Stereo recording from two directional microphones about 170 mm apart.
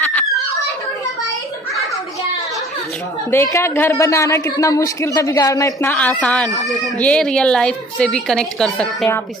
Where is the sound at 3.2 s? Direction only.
15° left (ahead or behind).